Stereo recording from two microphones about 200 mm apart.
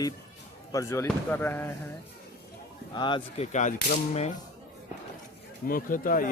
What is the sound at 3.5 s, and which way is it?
Whip, 35° left (ahead or behind).